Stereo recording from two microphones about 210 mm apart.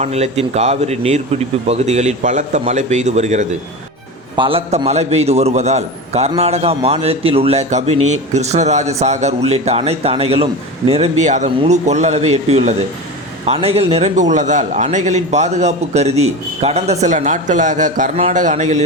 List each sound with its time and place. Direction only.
0.0 s a man's voice: 30° right (ahead or behind)